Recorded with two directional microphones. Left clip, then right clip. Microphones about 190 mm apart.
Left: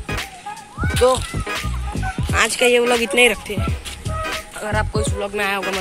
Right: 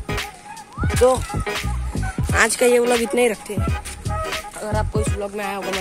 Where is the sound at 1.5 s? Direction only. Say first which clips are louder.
Left 1 dB; centre (ahead or behind).